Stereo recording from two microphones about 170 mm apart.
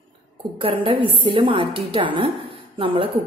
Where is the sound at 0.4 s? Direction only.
30° right (ahead or behind).